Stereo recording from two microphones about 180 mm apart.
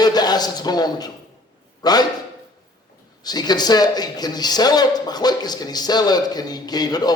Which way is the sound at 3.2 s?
20° left (ahead or behind).